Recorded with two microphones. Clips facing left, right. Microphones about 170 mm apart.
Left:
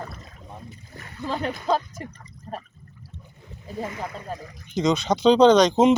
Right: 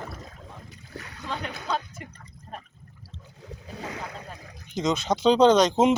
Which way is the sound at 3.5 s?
90° right.